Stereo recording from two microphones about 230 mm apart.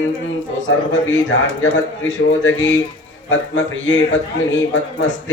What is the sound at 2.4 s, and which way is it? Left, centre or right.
Speech, left.